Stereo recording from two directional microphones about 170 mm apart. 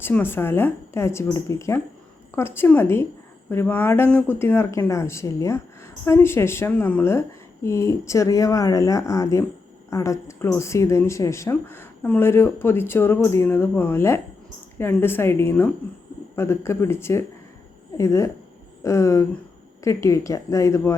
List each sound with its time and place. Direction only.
0.0 s speech: 10° left (ahead or behind)